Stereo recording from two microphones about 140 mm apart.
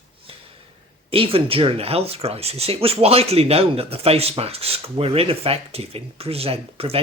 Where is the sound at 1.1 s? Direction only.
40° right (ahead or behind).